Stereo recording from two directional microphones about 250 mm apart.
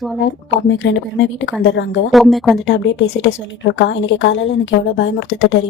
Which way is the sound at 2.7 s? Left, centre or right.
Left.